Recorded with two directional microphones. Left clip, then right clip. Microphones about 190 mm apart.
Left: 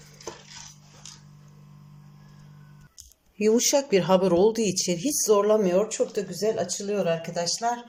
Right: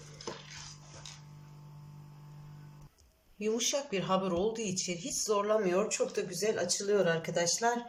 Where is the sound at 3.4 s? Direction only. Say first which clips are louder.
Left 11 dB; 35° left (ahead or behind).